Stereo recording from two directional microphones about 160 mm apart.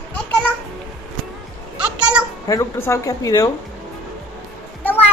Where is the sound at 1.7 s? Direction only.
5° right (ahead or behind).